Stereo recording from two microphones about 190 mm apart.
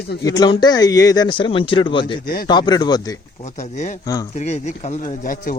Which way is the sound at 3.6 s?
40° left (ahead or behind).